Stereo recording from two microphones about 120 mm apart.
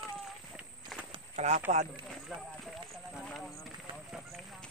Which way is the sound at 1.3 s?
70° right (ahead or behind).